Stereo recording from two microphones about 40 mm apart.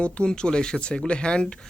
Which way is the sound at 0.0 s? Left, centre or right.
Left.